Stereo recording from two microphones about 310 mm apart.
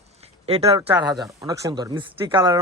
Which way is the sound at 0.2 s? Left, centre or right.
Centre.